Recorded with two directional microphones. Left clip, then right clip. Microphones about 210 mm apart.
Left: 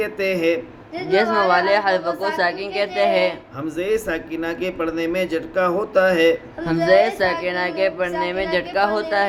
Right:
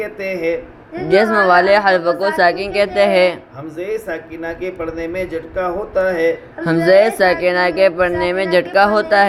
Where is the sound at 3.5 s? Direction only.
50° left (ahead or behind).